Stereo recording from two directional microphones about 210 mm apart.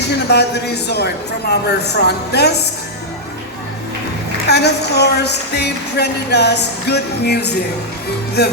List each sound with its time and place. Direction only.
0.3 s a woman's voice: 50° left (ahead or behind)
4.4 s a woman's voice: 50° left (ahead or behind)